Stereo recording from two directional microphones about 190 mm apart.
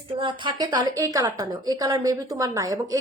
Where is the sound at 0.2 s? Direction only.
25° right (ahead or behind).